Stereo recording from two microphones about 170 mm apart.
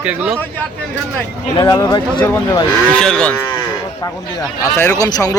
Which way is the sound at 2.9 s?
5° left (ahead or behind).